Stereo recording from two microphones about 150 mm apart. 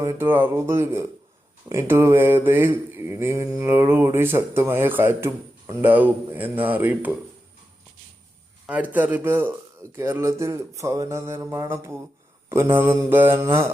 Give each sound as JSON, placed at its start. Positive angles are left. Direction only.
{"t": 0.0, "sound": "mantra", "side_deg": -15}
{"t": 8.6, "sound": "mantra", "side_deg": -10}